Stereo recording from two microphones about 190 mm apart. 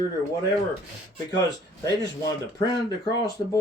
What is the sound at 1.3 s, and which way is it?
Speech, 20° left (ahead or behind).